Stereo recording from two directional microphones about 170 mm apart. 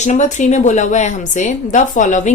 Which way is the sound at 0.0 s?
45° left (ahead or behind).